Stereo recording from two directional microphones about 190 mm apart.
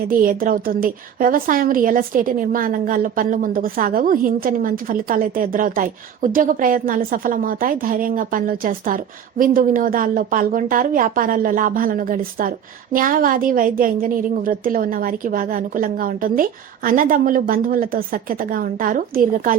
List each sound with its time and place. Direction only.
0.1 s a woman's voice: 50° right (ahead or behind)